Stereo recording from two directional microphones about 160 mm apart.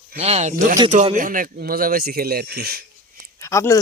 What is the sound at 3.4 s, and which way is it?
Speech, 20° left (ahead or behind).